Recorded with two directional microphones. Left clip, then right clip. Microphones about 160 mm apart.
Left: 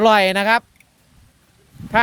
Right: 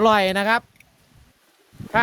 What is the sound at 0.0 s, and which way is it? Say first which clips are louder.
Speech: left 3 dB; 5° left (ahead or behind).